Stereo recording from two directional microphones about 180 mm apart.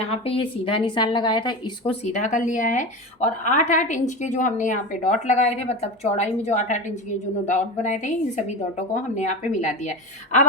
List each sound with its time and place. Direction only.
0.0 s a woman's voice: 30° left (ahead or behind)
2.0 s a woman's voice: 40° left (ahead or behind)